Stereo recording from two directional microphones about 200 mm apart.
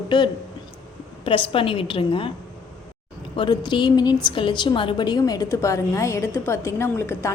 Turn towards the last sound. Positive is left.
turn(degrees=10)  # may be behind; listen again after turning